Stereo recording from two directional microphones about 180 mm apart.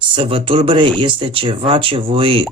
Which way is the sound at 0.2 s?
30° right (ahead or behind).